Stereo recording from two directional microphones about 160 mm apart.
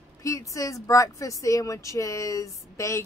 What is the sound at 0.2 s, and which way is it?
Speech, 20° left (ahead or behind).